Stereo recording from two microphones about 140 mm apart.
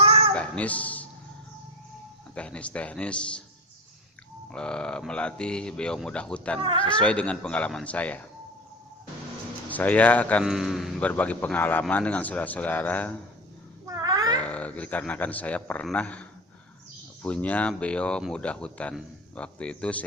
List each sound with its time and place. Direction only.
0.0 s a sound: 45° right (ahead or behind)
0.3 s a sound: 10° left (ahead or behind)
2.3 s a man's voice: 10° left (ahead or behind)
4.5 s a man's voice: 5° left (ahead or behind)
6.6 s speech: 40° right (ahead or behind)
6.8 s a man's voice: 10° left (ahead or behind)
9.6 s a man's voice: 10° left (ahead or behind)
10.4 s a man's voice: centre (ahead or behind)
11.0 s a man's voice: 10° left (ahead or behind)
13.8 s a sound: 25° right (ahead or behind)
14.4 s a man's voice: 10° left (ahead or behind)
17.2 s a man's voice: 10° left (ahead or behind)